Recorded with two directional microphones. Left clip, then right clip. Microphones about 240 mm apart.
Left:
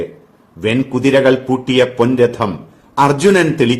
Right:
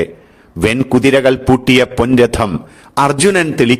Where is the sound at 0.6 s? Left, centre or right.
Right.